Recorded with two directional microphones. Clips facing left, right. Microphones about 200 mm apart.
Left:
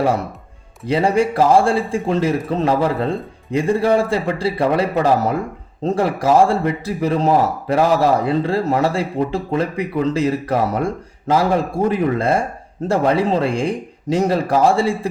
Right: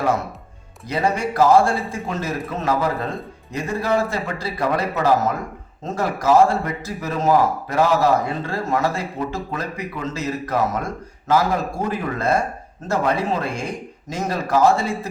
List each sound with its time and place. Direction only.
0.9 s a man's voice: 30° left (ahead or behind)